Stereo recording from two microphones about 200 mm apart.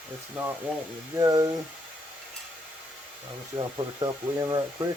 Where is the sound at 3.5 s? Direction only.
20° right (ahead or behind).